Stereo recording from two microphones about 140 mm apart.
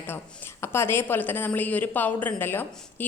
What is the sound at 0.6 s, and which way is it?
A woman's voice, 15° left (ahead or behind).